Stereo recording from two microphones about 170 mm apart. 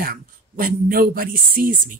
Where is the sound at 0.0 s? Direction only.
55° right (ahead or behind).